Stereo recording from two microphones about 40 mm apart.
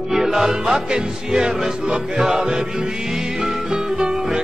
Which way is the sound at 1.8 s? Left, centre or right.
Right.